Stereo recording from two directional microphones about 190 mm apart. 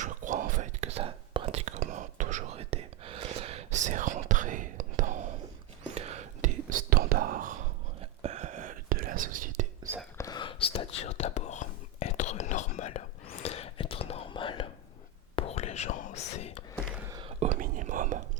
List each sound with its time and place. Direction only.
0.0 s whispering: 40° right (ahead or behind)
10.2 s whispering: 20° left (ahead or behind)
17.1 s whispering: 20° right (ahead or behind)
17.4 s whispering: 40° right (ahead or behind)